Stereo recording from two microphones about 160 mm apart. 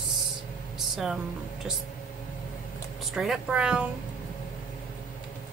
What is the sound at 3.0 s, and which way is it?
Speech, centre (ahead or behind).